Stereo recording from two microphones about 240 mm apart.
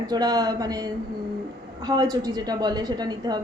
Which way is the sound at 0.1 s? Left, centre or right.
Centre.